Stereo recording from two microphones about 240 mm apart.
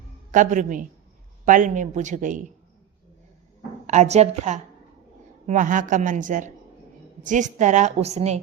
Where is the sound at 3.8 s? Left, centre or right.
Right.